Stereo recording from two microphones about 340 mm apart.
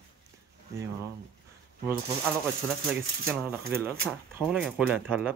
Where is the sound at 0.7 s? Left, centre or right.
Centre.